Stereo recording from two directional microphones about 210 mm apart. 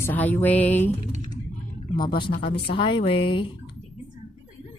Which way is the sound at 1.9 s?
20° left (ahead or behind).